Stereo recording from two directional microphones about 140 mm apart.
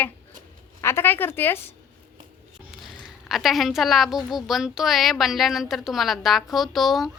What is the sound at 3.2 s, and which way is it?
A woman's voice, centre (ahead or behind).